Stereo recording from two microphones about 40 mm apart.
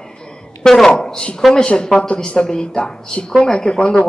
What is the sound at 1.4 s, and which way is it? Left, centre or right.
Speech, centre.